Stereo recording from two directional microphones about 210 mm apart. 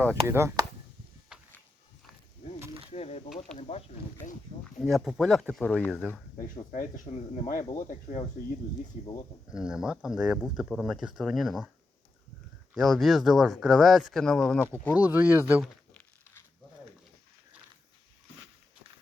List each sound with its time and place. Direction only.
0.1 s speech: 10° right (ahead or behind)
1.3 s a sound: 5° right (ahead or behind)
2.9 s a sound: 30° left (ahead or behind)
3.6 s speech: 30° left (ahead or behind)
4.6 s speech: centre (ahead or behind)
6.7 s speech: 40° left (ahead or behind)
9.5 s speech: 5° right (ahead or behind)
12.7 s speech: centre (ahead or behind)
14.9 s speech: 10° right (ahead or behind)